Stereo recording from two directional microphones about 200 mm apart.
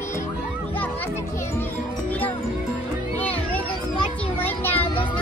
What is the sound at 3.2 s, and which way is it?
Music, 10° left (ahead or behind).